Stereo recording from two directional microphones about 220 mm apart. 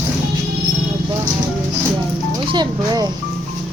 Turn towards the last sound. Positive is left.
turn(degrees=-20)  # may be behind; listen again after turning